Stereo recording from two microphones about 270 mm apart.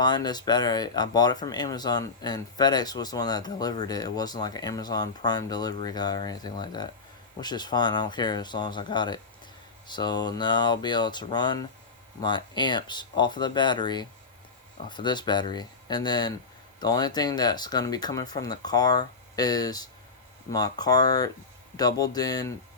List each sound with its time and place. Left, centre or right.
0.0 s speech: centre